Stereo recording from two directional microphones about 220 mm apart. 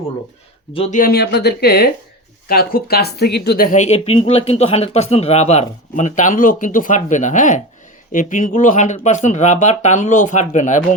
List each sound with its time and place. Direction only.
0.7 s speech: 25° left (ahead or behind)
0.9 s speech: 45° left (ahead or behind)